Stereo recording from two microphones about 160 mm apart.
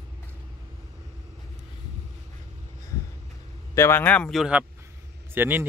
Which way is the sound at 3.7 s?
15° left (ahead or behind).